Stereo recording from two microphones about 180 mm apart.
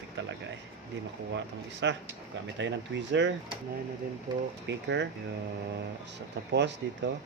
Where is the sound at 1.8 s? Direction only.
90° right.